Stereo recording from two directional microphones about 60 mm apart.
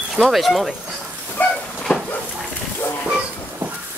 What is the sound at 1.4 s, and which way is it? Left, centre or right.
Cupboard open or close, left.